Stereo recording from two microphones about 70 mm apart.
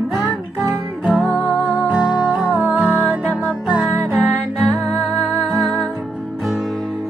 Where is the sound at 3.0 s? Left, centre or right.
Centre.